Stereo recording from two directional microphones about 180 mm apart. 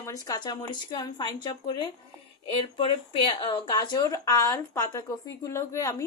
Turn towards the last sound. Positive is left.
turn(degrees=20)  # may be behind; listen again after turning